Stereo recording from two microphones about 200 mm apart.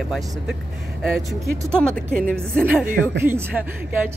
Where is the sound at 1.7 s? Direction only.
5° left (ahead or behind).